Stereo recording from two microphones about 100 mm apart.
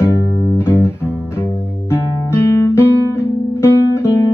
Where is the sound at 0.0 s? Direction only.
25° left (ahead or behind).